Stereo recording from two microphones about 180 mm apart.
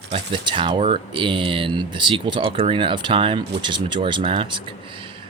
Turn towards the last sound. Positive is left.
turn(degrees=-30)  # may be behind; listen again after turning